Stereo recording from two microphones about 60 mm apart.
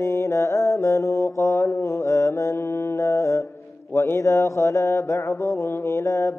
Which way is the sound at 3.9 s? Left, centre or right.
Left.